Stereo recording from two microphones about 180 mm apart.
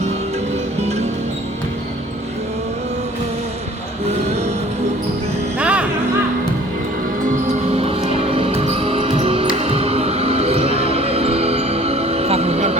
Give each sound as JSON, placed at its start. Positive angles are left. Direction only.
{"t": 5.5, "sound": "music", "side_deg": -5}
{"t": 7.2, "sound": "music", "side_deg": -45}